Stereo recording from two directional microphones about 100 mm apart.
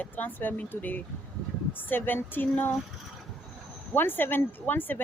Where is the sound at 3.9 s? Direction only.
20° left (ahead or behind).